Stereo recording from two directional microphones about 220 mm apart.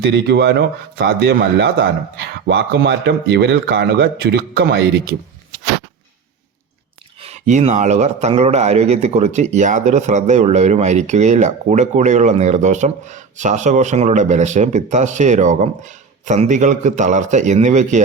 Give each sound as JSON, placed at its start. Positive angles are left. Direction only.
{"t": 0.0, "sound": "speech", "side_deg": -50}
{"t": 7.2, "sound": "speech", "side_deg": -30}